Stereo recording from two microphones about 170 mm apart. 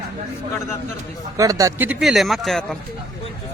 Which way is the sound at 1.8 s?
Centre (ahead or behind).